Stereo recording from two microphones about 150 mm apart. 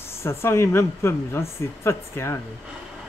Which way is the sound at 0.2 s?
15° left (ahead or behind).